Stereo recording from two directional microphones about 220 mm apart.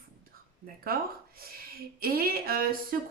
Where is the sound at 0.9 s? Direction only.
40° right (ahead or behind).